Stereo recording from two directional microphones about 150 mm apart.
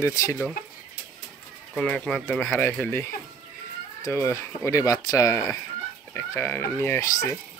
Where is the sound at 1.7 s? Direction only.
5° left (ahead or behind); by 7.4 s 20° left (ahead or behind).